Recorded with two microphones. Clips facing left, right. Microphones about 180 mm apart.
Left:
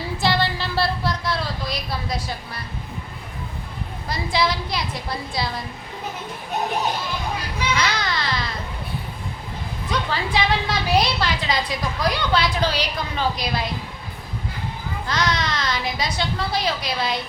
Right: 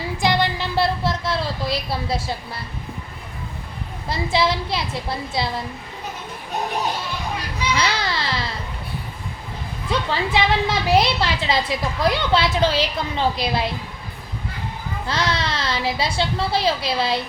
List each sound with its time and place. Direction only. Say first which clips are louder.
0.2 s music: right 2 dB; 20° right (ahead or behind)
4.1 s a woman's voice: right 2 dB; 25° right (ahead or behind)
7.8 s baby cry: right 1 dB; 30° right (ahead or behind)
9.9 s a woman's voice: right 2 dB; 25° right (ahead or behind)
15.0 s a woman's voice: even; 30° right (ahead or behind)